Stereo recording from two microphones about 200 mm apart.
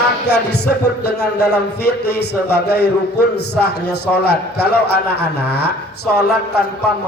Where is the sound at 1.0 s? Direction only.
55° left (ahead or behind).